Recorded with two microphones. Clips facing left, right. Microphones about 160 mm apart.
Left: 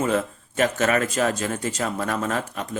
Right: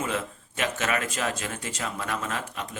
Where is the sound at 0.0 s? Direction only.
40° left (ahead or behind).